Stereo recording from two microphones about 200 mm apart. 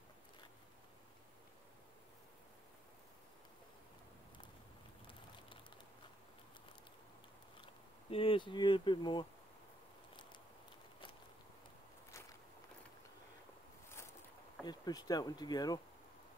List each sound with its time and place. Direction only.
7.6 s speech: 25° left (ahead or behind)
14.6 s speech: 20° left (ahead or behind)